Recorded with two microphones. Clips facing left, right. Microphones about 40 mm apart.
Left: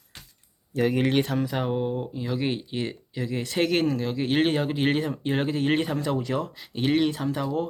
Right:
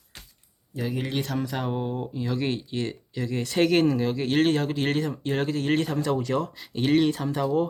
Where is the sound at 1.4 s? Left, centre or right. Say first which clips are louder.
Left 2 dB; centre.